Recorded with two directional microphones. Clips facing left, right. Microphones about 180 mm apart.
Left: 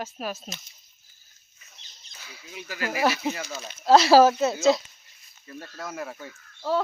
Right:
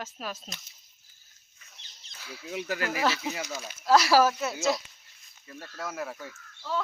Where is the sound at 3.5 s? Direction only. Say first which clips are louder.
Left 1 dB; 5° right (ahead or behind).